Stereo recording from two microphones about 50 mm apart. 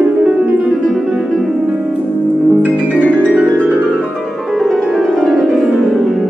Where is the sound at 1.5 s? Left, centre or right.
Centre.